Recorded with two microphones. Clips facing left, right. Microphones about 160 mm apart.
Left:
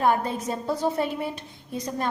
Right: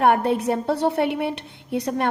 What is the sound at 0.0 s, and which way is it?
A woman's voice, 65° right (ahead or behind).